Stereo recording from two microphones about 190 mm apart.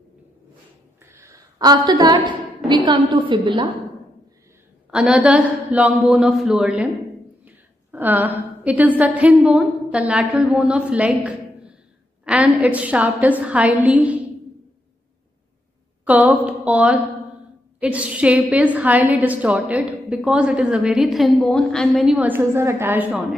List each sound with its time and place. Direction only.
1.0 s a woman's voice: 15° right (ahead or behind)
4.9 s a man's voice: 5° right (ahead or behind)
16.1 s a woman's voice: 10° right (ahead or behind)